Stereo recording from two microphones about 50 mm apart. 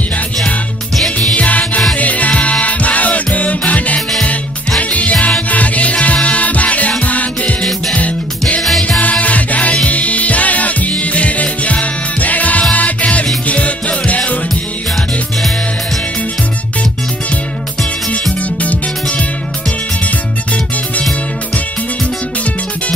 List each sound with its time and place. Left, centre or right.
0.9 s music: centre
1.3 s music: left
18.6 s music: left